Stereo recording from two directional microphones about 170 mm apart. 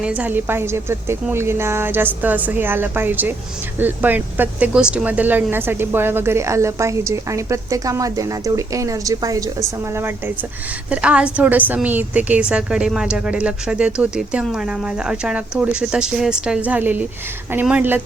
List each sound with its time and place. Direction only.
0.0 s a woman's voice: 10° right (ahead or behind)